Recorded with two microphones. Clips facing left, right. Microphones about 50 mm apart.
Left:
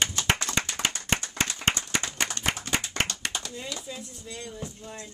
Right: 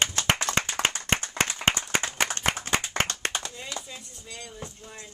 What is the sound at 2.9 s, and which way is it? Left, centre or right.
Clapping, right.